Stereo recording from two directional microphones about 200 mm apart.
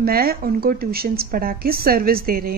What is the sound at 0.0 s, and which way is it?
Speech, 50° right (ahead or behind).